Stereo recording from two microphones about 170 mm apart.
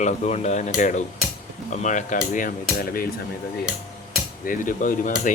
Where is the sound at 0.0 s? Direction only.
40° left (ahead or behind); by 3.1 s 60° left (ahead or behind).